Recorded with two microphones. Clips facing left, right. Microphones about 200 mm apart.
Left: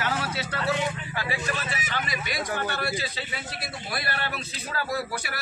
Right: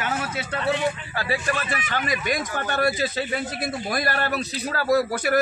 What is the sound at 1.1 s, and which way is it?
Speech, 40° right (ahead or behind).